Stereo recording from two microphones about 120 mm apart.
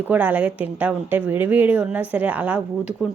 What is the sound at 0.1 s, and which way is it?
A woman's voice, 15° right (ahead or behind).